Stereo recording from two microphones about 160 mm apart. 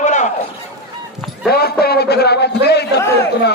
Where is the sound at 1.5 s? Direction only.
75° left (ahead or behind).